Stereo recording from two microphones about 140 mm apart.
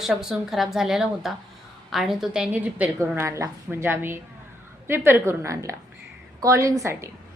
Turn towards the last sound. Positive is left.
turn(degrees=-20)  # may be behind; listen again after turning